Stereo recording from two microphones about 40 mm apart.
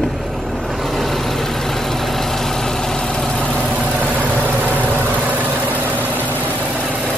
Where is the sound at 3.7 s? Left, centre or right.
Right.